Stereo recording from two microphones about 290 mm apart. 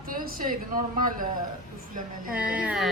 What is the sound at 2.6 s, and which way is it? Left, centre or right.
Speech, centre.